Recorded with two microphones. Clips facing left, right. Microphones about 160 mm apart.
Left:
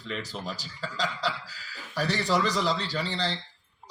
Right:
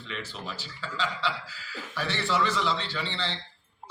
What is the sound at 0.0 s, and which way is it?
A man's voice, 40° left (ahead or behind).